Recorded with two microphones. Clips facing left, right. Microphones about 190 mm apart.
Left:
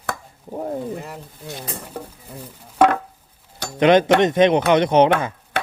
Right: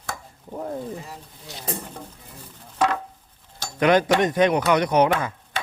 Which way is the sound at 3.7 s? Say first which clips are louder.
Left 4 dB; 20° left (ahead or behind).